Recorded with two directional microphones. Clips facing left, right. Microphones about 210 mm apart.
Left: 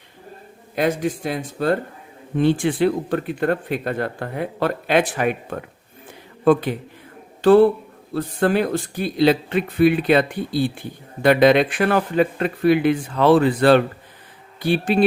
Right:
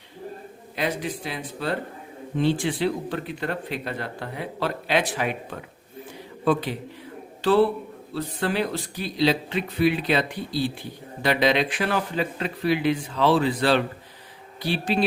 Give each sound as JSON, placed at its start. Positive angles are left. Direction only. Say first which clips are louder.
{"t": 0.8, "sound": "speech", "louder": "left 7 dB", "side_deg": 50}